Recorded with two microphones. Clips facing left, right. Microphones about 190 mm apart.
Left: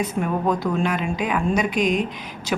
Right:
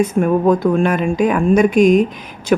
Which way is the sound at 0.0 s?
50° right (ahead or behind).